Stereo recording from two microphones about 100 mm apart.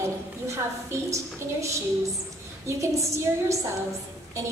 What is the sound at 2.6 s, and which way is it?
Speech, 30° right (ahead or behind).